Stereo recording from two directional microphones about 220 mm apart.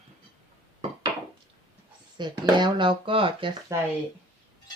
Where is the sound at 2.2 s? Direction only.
20° right (ahead or behind).